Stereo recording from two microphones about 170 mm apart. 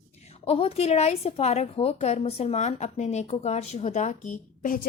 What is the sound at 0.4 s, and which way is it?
A woman's voice, 35° left (ahead or behind).